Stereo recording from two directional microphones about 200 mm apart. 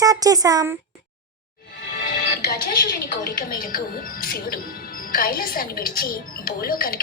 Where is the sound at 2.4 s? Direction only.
50° left (ahead or behind).